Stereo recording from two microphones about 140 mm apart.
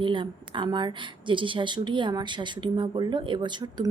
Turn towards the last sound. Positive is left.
turn(degrees=-30)  # may be behind; listen again after turning